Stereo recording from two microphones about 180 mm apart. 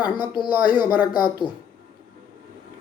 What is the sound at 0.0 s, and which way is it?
Speech, 25° left (ahead or behind).